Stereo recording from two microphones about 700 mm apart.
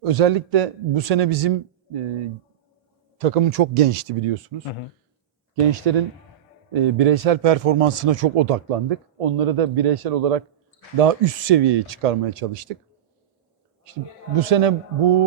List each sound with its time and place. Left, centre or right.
0.0 s a man's voice: right
3.2 s speech: right
5.8 s a man's voice: right
13.9 s a man's voice: right